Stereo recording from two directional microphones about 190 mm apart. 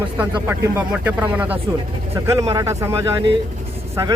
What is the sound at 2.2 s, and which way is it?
Speech, 25° right (ahead or behind).